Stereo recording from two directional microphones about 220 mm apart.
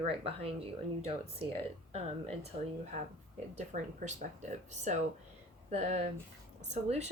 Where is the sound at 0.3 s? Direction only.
25° right (ahead or behind).